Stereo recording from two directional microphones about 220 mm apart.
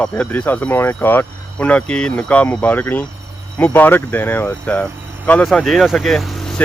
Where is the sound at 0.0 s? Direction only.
5° left (ahead or behind).